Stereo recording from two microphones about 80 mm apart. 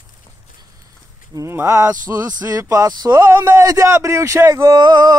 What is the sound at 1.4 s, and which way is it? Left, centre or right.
Speech, right.